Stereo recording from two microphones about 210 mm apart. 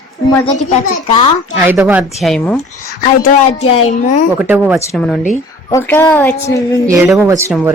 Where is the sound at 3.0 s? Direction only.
35° left (ahead or behind).